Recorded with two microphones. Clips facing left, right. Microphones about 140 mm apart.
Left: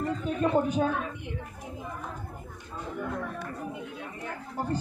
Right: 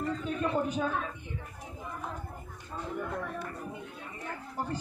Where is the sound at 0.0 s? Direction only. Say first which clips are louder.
Left 4 dB; 25° left (ahead or behind).